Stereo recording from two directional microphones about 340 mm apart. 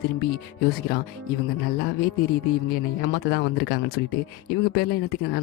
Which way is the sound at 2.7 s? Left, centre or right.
Left.